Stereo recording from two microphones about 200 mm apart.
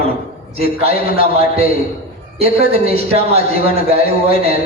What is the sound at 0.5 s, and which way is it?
Speech, 30° right (ahead or behind).